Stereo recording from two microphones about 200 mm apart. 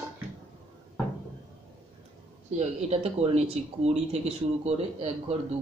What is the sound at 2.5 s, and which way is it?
Speech, 30° right (ahead or behind).